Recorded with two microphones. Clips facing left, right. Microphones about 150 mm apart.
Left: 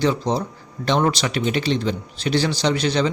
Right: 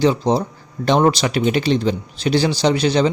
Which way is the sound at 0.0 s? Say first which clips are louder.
Right 4 dB; 30° right (ahead or behind).